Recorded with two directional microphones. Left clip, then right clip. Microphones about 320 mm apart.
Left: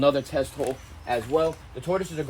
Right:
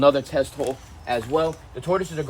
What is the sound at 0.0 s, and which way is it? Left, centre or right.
Speech, centre.